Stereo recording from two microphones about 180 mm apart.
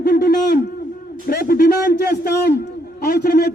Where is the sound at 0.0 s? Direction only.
60° left (ahead or behind).